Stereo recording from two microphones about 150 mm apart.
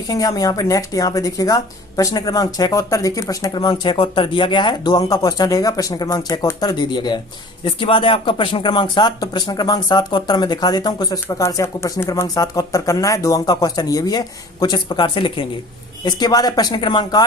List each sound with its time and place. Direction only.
0.1 s speech: 25° left (ahead or behind)